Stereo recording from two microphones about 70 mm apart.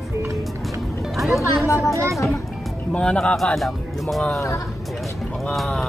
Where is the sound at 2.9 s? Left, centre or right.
Centre.